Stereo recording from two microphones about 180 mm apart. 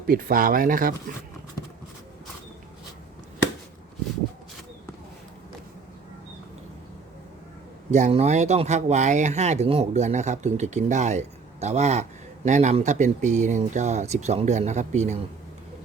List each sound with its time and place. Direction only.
0.1 s speech: 55° right (ahead or behind)
7.9 s speech: 40° right (ahead or behind)